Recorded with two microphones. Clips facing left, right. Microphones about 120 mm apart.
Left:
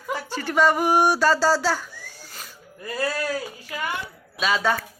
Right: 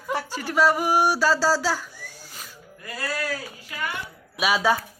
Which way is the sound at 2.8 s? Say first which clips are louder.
Left 5 dB; 30° left (ahead or behind).